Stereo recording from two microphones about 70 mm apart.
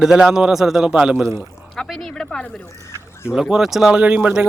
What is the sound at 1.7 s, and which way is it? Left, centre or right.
Speech, centre.